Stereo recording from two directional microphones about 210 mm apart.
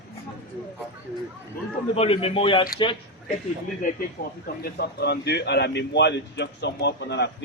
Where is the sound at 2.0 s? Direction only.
25° left (ahead or behind).